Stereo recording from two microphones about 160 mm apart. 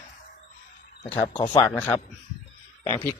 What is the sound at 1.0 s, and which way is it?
Speech, 30° left (ahead or behind).